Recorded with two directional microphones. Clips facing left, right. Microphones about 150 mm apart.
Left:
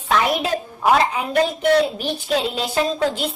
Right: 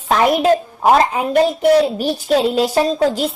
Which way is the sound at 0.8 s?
40° right (ahead or behind).